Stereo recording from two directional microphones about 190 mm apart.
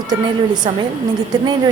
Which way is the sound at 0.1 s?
20° right (ahead or behind).